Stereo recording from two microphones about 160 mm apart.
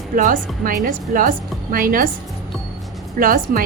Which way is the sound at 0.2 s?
55° right (ahead or behind).